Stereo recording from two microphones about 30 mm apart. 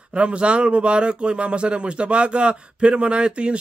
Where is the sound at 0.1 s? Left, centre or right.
Right.